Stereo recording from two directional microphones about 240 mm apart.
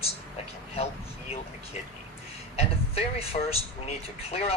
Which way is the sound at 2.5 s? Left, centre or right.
Left.